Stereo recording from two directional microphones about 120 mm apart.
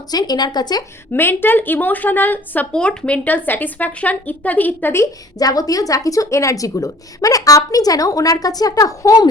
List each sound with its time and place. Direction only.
0.1 s speech: 35° left (ahead or behind)
1.1 s speech: 20° left (ahead or behind)
5.4 s speech: 30° left (ahead or behind)